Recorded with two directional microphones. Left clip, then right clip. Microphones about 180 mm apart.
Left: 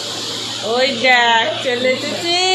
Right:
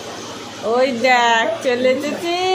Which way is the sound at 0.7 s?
25° right (ahead or behind).